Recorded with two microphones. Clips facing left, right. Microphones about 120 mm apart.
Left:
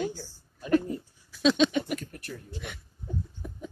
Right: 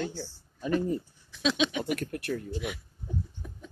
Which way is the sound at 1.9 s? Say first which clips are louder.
Right 4 dB; 65° right (ahead or behind).